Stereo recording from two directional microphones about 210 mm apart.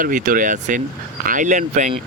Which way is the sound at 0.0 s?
40° right (ahead or behind).